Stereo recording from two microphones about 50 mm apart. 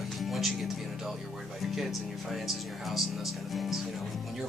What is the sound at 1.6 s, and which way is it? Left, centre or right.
Speech, centre.